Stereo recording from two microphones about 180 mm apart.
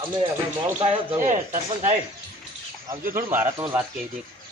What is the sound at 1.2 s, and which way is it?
Speech, 45° right (ahead or behind).